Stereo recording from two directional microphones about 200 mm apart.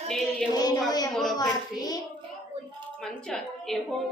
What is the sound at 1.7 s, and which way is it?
Child singing, 20° left (ahead or behind).